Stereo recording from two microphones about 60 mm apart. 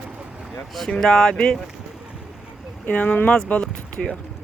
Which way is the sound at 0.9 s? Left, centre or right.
Centre.